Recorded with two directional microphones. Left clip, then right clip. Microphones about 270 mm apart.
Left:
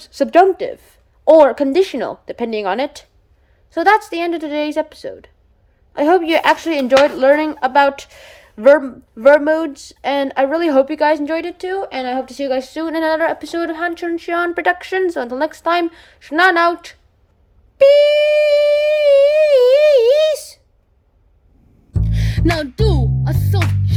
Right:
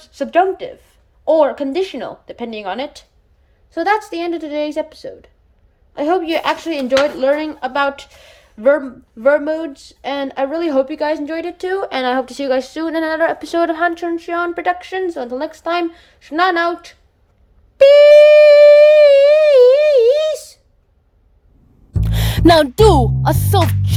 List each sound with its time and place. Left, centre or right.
0.1 s a woman's voice: centre
17.7 s humming: centre
22.0 s music: right